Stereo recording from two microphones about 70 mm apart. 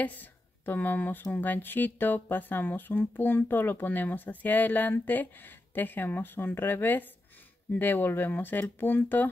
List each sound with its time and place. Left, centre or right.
0.0 s speech: left